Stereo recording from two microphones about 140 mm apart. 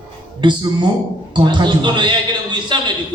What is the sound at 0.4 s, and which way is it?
A man's voice, 35° right (ahead or behind).